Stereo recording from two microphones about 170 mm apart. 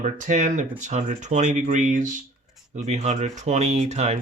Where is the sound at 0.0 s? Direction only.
45° right (ahead or behind).